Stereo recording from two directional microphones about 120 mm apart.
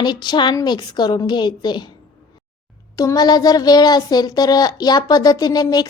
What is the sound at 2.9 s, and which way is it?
Speech, 30° left (ahead or behind).